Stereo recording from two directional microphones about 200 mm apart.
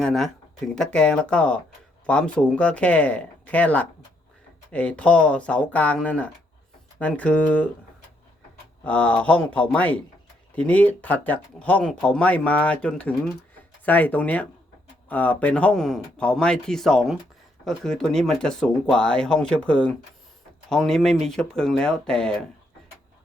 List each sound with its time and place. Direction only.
0.0 s speech: centre (ahead or behind)
8.8 s speech: 5° left (ahead or behind)